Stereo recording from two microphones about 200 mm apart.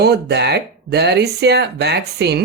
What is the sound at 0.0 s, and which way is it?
Speech, 55° right (ahead or behind).